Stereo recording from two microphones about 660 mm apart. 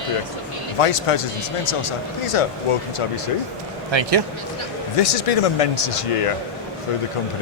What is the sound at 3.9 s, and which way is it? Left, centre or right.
Speech, right.